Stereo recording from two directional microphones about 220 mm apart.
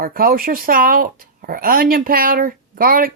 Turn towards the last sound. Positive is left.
turn(degrees=-40)  # may be behind; listen again after turning